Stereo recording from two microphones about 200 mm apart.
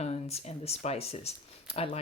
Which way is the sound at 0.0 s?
30° left (ahead or behind).